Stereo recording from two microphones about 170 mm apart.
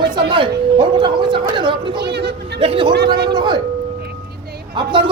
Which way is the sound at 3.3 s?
25° right (ahead or behind).